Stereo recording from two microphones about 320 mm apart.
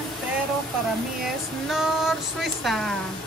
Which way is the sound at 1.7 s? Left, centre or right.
Centre.